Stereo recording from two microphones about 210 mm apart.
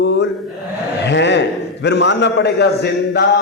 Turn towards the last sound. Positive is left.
turn(degrees=55)  # may be behind; listen again after turning